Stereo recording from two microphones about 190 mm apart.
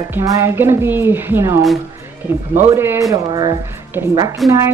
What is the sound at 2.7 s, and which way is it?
Speech, 15° right (ahead or behind).